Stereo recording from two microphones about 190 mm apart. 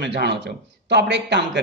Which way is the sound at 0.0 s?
65° right (ahead or behind).